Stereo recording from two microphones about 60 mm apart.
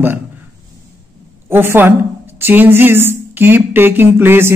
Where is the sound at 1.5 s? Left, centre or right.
Right.